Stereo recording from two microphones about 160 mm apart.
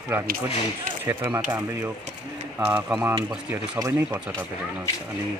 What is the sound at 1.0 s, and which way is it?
Speech, 15° right (ahead or behind).